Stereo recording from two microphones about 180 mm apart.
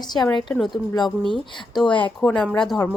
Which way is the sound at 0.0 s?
25° left (ahead or behind).